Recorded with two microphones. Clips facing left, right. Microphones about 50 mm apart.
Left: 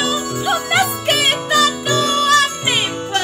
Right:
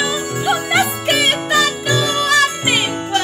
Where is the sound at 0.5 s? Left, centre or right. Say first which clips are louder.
Right 1 dB; centre.